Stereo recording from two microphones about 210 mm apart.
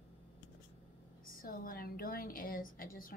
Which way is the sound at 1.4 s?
45° left (ahead or behind).